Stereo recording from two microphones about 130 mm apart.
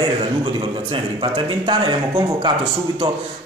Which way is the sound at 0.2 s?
40° right (ahead or behind).